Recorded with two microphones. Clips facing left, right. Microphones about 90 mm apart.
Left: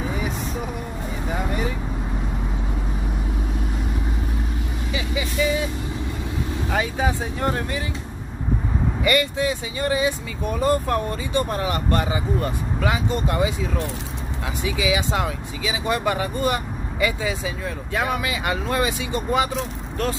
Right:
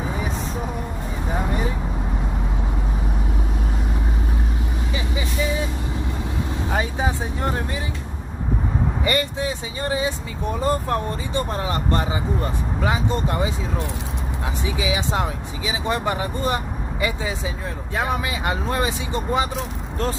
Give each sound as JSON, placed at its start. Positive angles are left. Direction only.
{"t": 6.7, "sound": "vehicle", "side_deg": -25}
{"t": 9.0, "sound": "speech", "side_deg": -30}